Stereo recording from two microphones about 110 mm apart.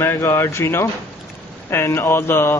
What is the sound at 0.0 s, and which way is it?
Speech, 20° left (ahead or behind).